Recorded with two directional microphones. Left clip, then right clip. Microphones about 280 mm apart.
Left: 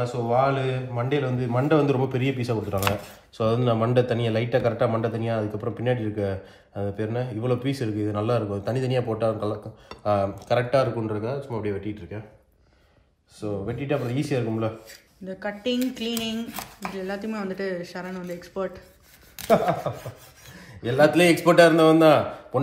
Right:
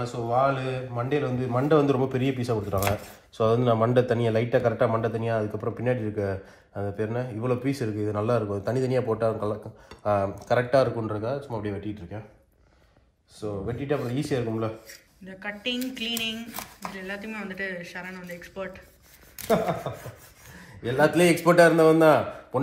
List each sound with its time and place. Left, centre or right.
0.0 s a man's voice: centre
13.4 s a man's voice: centre